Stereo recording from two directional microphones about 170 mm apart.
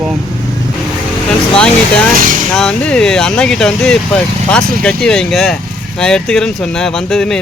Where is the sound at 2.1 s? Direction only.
55° right (ahead or behind).